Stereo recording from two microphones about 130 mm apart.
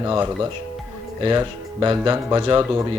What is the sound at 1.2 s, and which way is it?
Speech, 35° right (ahead or behind).